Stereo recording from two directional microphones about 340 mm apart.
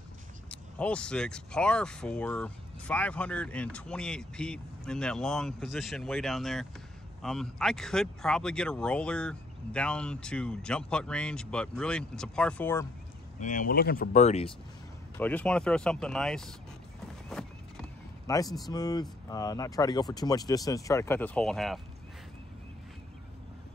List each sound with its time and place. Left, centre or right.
0.5 s speech: centre
13.4 s speech: left
15.1 s speech: centre